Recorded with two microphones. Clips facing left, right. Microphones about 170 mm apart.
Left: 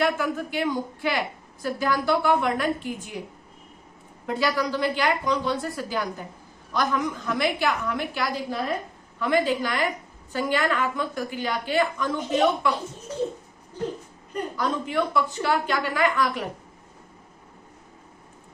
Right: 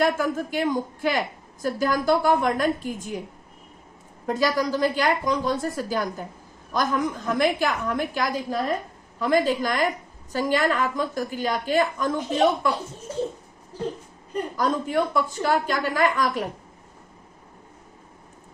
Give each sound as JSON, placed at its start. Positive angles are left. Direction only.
{"t": 0.0, "sound": "a woman's voice", "side_deg": -45}
{"t": 4.3, "sound": "a woman's voice", "side_deg": -40}
{"t": 14.5, "sound": "a woman's voice", "side_deg": -45}